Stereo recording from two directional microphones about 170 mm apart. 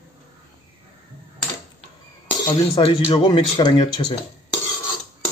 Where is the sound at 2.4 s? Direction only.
30° left (ahead or behind).